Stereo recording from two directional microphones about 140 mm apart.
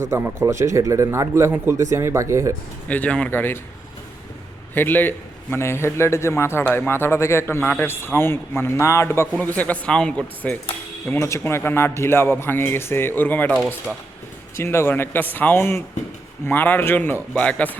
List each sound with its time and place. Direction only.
0.0 s a man's voice: 20° right (ahead or behind)
2.9 s a man's voice: 10° left (ahead or behind)
4.7 s a man's voice: 15° left (ahead or behind)